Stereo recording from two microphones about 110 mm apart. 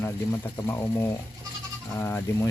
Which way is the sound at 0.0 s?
25° left (ahead or behind).